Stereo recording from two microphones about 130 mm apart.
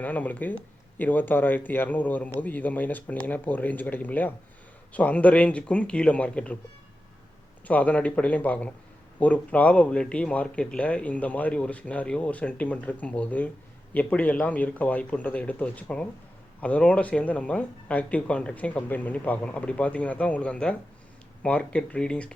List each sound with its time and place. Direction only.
0.0 s speech: 10° left (ahead or behind)
7.7 s speech: 10° left (ahead or behind)